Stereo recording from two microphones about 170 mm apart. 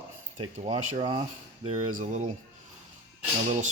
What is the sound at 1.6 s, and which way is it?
Speech, 45° right (ahead or behind).